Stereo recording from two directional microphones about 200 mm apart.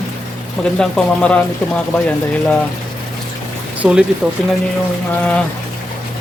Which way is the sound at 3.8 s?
5° right (ahead or behind).